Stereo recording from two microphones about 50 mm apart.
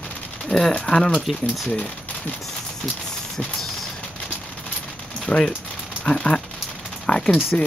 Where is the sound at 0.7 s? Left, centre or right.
Centre.